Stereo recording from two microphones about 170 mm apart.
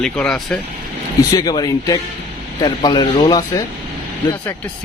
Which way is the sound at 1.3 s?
25° left (ahead or behind).